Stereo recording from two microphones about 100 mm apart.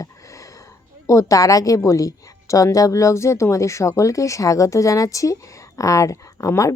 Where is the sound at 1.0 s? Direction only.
35° left (ahead or behind).